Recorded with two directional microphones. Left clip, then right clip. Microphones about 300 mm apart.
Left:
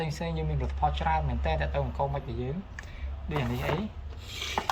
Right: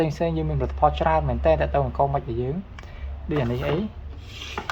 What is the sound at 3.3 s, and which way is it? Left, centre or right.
Speech, centre.